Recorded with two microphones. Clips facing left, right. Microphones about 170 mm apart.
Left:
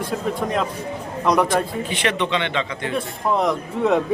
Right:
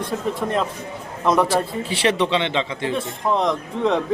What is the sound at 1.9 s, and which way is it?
Speech, 30° right (ahead or behind).